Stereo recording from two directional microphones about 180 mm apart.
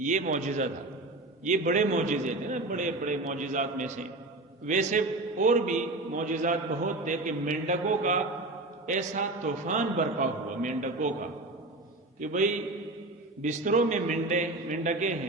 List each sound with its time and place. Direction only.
0.0 s a man's voice: 45° right (ahead or behind)
12.2 s a man's voice: 45° right (ahead or behind)